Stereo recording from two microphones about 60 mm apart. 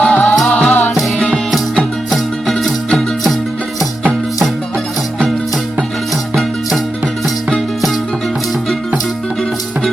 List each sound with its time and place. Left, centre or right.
0.0 s music: left
1.5 s music: centre